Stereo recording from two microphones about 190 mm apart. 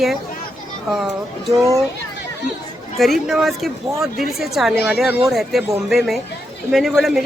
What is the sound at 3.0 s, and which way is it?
Speech, centre (ahead or behind).